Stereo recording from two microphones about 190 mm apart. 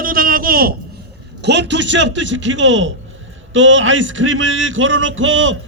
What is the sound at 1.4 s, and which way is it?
A man's voice, 65° right (ahead or behind).